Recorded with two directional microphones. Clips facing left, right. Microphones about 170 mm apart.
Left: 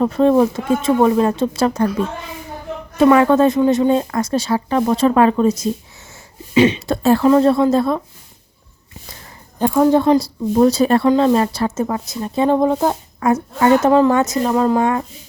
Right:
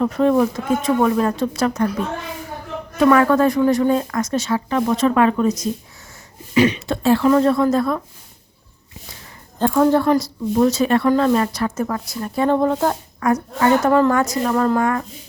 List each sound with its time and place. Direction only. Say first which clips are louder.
0.0 s speech: left 3 dB; 30° left (ahead or behind)
3.0 s speech: left 3 dB; 25° left (ahead or behind)
6.8 s speech: left 2 dB; 40° left (ahead or behind)
7.3 s speech: left 3 dB; 30° left (ahead or behind)
9.6 s a woman's voice: left 2 dB; 10° left (ahead or behind)
10.5 s speech: left 3 dB; 35° left (ahead or behind); by 13.0 s 15° left (ahead or behind)
13.1 s speech: left 2 dB; 25° left (ahead or behind)